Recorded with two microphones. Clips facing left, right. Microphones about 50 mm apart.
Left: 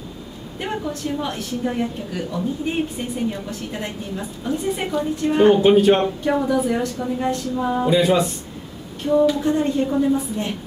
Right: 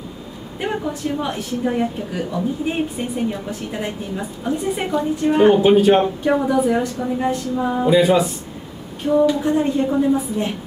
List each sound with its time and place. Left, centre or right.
0.6 s a woman's voice: centre